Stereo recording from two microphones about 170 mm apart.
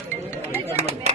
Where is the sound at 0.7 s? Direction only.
40° right (ahead or behind).